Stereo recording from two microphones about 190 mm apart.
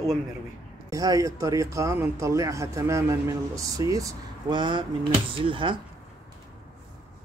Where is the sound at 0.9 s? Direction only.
20° right (ahead or behind).